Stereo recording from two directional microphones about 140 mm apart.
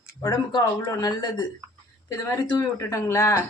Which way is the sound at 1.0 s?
30° left (ahead or behind).